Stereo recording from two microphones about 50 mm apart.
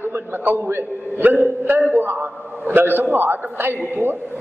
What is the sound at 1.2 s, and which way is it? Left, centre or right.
A man's voice, right.